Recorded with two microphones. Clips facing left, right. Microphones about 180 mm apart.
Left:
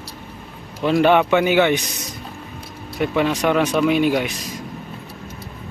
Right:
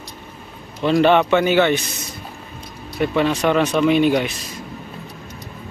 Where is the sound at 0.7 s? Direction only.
10° left (ahead or behind).